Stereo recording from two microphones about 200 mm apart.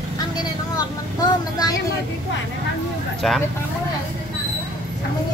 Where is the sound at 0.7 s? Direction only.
20° left (ahead or behind).